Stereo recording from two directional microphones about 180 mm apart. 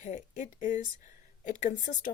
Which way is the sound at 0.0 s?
40° left (ahead or behind).